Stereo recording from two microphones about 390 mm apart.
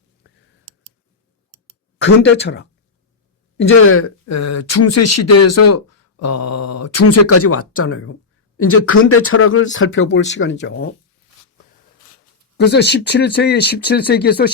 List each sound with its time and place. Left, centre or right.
2.0 s speech: left
12.5 s speech: left